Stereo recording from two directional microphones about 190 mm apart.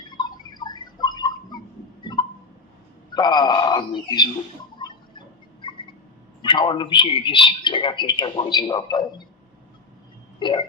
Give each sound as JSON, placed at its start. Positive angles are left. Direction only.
{"t": 0.2, "sound": "a sound", "side_deg": 20}
{"t": 3.1, "sound": "a man's voice", "side_deg": 25}
{"t": 4.8, "sound": "rodents", "side_deg": 25}
{"t": 6.4, "sound": "a man's voice", "side_deg": 25}
{"t": 10.4, "sound": "a man's voice", "side_deg": 25}